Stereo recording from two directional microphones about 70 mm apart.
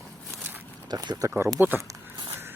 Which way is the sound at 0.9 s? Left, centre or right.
Right.